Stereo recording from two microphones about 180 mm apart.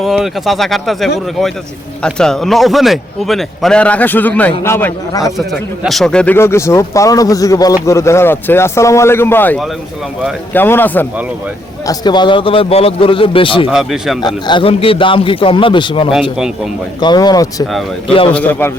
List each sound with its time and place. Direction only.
0.0 s a man's voice: centre (ahead or behind); by 5.3 s 15° left (ahead or behind)
5.5 s speech: centre (ahead or behind)
11.9 s a man's voice: 25° left (ahead or behind)
13.7 s a man's voice: 5° right (ahead or behind)
14.2 s a man's voice: 25° left (ahead or behind)
18.3 s speech: 10° left (ahead or behind)